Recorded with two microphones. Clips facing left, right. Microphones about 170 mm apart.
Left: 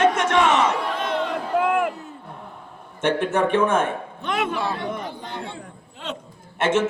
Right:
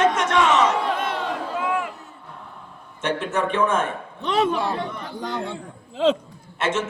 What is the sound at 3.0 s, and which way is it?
Speech, 55° left (ahead or behind).